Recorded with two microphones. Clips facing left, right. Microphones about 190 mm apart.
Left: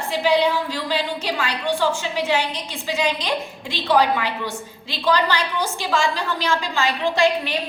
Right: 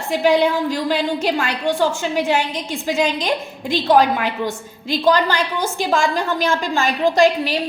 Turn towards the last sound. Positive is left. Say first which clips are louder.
# right 4 dB
turn(degrees=-40)  # may be behind; listen again after turning